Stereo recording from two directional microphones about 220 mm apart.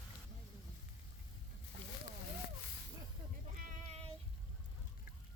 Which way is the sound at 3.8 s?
30° right (ahead or behind).